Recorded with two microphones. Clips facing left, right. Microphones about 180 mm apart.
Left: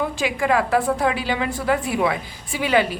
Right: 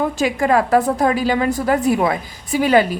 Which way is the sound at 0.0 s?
45° right (ahead or behind).